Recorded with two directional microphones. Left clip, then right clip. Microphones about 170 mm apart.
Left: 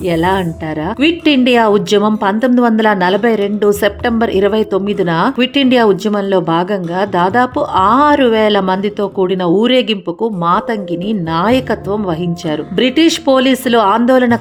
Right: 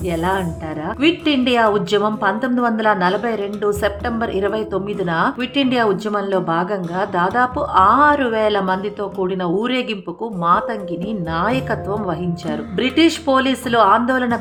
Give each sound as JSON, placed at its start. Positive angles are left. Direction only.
{"t": 0.1, "sound": "a woman's voice", "side_deg": 30}
{"t": 11.1, "sound": "a woman's voice", "side_deg": 35}